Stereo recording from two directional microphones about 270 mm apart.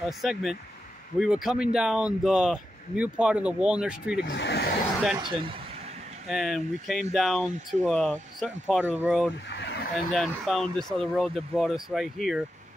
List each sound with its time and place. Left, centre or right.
0.2 s speech: centre
4.2 s speech: left
5.2 s a sound: centre
6.2 s speech: centre
9.5 s a sound: left
10.1 s speech: centre